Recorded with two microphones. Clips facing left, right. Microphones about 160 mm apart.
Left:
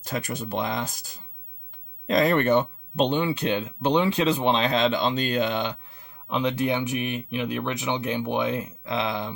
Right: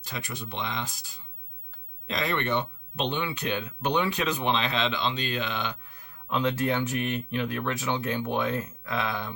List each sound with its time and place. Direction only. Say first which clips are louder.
0.0 s speech: left 7 dB; 45° left (ahead or behind)
6.2 s speech: left 2 dB; 20° left (ahead or behind)